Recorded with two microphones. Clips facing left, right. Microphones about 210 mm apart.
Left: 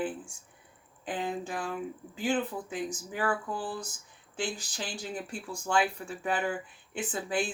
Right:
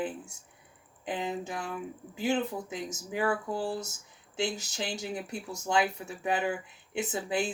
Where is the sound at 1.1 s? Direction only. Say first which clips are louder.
Even; 25° right (ahead or behind).